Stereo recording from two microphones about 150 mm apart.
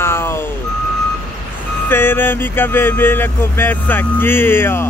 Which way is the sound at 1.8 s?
15° left (ahead or behind).